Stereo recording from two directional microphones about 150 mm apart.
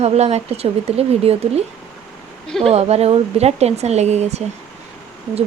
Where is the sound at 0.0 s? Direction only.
45° right (ahead or behind).